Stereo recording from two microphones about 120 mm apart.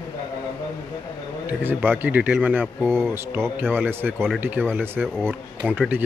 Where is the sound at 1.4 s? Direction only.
15° right (ahead or behind).